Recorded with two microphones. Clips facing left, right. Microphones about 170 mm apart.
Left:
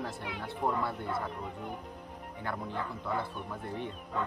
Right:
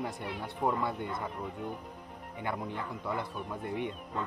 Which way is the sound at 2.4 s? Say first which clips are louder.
Right 1 dB; 15° right (ahead or behind).